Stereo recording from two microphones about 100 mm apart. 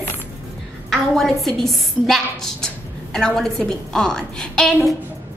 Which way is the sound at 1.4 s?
Centre (ahead or behind).